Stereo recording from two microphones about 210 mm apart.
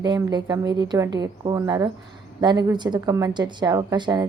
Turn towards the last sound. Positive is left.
turn(degrees=-20)  # may be behind; listen again after turning